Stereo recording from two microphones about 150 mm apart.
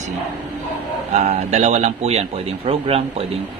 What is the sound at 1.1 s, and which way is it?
A man's voice, 50° right (ahead or behind).